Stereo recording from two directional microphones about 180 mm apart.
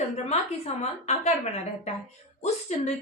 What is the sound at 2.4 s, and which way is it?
Speech, 40° left (ahead or behind).